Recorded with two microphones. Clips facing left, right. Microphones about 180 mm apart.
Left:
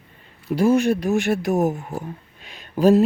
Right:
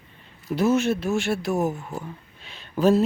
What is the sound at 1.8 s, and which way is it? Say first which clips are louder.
Speech: left 3 dB; 35° left (ahead or behind).